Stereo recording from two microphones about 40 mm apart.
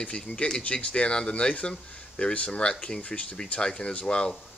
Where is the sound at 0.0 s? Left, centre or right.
Left.